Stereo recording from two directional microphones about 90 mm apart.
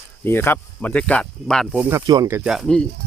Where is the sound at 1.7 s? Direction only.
15° right (ahead or behind).